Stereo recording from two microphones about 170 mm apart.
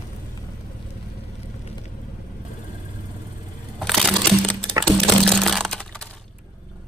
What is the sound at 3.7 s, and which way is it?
Crushing, centre (ahead or behind).